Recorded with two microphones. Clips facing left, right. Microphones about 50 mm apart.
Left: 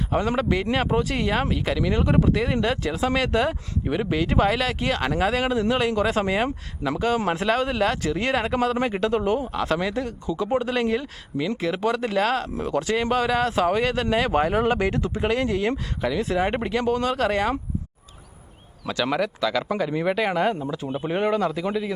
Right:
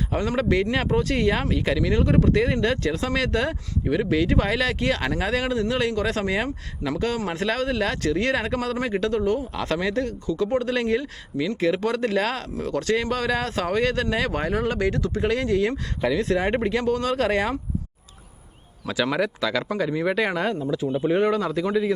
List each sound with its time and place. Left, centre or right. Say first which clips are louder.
0.1 s speech: even; centre
9.5 s speech: left 1 dB; centre
12.5 s speech: even; centre
16.0 s speech: right 3 dB; centre
18.9 s speech: right 1 dB; centre
20.5 s speech: right 2 dB; centre